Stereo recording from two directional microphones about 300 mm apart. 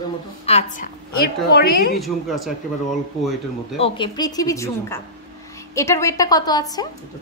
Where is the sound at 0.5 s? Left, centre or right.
Left.